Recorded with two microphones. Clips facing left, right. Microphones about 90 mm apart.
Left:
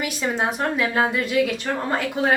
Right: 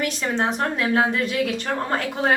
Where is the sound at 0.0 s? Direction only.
10° left (ahead or behind).